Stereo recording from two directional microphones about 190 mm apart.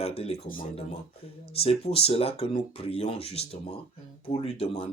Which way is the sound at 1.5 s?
30° left (ahead or behind).